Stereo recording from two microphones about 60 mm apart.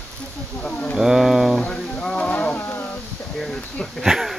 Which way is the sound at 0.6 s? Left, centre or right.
Left.